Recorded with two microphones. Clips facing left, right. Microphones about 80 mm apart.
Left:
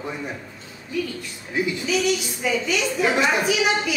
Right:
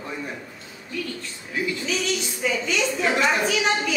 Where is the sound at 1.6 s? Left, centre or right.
Centre.